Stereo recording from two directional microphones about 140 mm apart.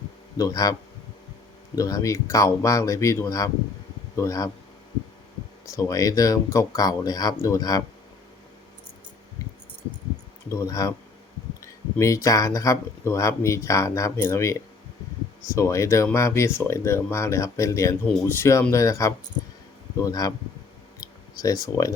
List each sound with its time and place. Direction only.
0.3 s speech: 25° left (ahead or behind)
5.6 s speech: 25° left (ahead or behind)
10.5 s speech: 20° left (ahead or behind)
21.0 s a sound: 25° left (ahead or behind)